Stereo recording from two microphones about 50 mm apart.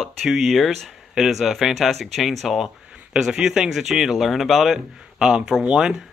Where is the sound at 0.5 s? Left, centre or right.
Centre.